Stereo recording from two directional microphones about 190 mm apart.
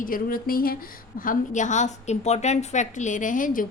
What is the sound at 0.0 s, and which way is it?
A woman's voice, 50° left (ahead or behind).